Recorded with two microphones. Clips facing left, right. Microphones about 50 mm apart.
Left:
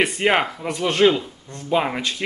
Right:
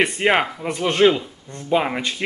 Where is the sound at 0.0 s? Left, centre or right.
Centre.